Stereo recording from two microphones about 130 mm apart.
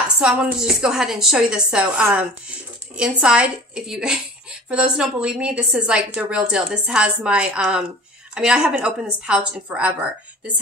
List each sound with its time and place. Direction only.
0.2 s a woman's voice: 10° right (ahead or behind)